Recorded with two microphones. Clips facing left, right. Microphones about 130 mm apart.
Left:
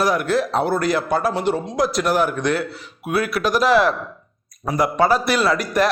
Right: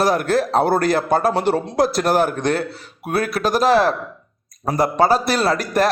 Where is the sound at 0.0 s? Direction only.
35° right (ahead or behind); by 1.6 s 60° right (ahead or behind).